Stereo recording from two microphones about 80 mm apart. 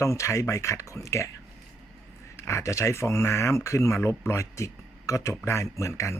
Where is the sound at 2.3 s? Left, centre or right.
Left.